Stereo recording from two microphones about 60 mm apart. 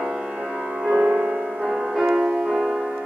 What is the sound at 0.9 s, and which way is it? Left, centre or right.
Music, right.